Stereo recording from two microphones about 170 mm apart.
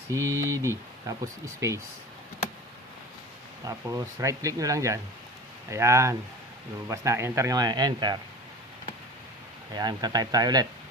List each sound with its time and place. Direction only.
0.1 s speech: 15° right (ahead or behind)
3.6 s speech: 20° right (ahead or behind)
9.7 s speech: 25° right (ahead or behind)